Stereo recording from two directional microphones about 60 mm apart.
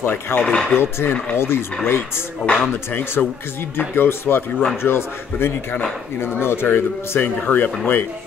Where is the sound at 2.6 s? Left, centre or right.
Left.